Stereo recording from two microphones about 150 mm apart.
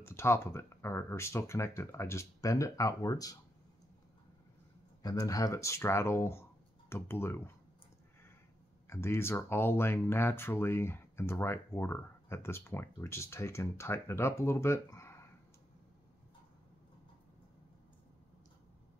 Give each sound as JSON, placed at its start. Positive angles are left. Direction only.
{"t": 0.0, "sound": "speech", "side_deg": 15}
{"t": 5.0, "sound": "speech", "side_deg": 25}
{"t": 8.8, "sound": "speech", "side_deg": 15}